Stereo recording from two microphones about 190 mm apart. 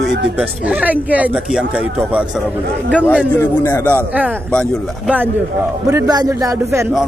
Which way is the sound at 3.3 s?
10° left (ahead or behind).